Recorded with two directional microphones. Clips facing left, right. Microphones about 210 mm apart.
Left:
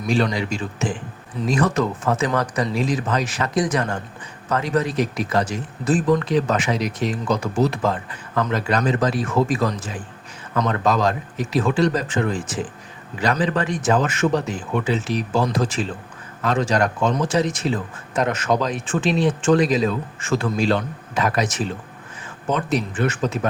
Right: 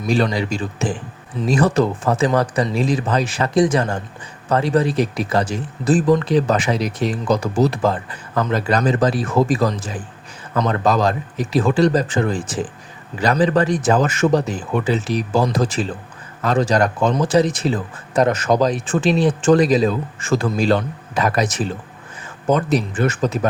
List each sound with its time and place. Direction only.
0.1 s speech: 35° right (ahead or behind)